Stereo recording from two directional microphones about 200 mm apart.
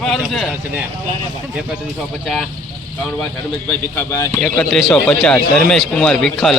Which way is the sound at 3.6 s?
5° left (ahead or behind).